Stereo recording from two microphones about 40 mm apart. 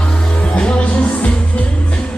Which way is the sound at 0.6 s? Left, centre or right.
Left.